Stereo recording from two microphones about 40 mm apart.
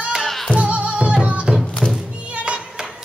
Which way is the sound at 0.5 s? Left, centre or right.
Right.